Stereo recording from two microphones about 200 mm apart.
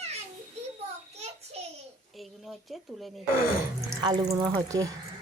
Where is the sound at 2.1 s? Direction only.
Centre (ahead or behind).